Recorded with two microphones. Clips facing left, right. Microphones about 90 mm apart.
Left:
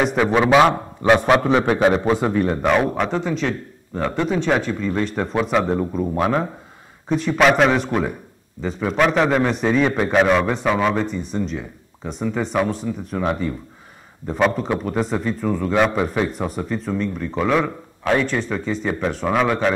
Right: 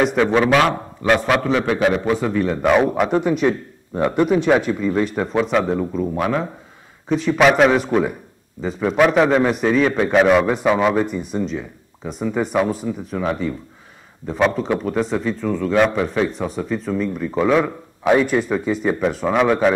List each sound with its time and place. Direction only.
0.1 s a man's voice: 15° left (ahead or behind)
1.3 s a man's voice: 25° left (ahead or behind)
2.1 s a man's voice: 20° left (ahead or behind)
2.4 s a man's voice: 5° left (ahead or behind)
2.9 s a man's voice: 10° right (ahead or behind)
14.2 s a man's voice: centre (ahead or behind)